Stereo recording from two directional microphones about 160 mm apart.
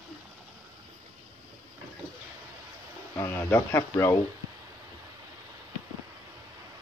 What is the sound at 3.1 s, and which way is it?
Speech, 15° left (ahead or behind).